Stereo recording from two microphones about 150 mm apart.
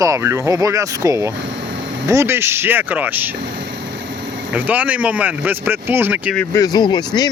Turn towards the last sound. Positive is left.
turn(degrees=30)  # may be behind; listen again after turning